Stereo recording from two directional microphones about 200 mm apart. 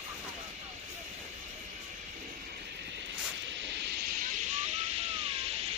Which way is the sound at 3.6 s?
60° right (ahead or behind).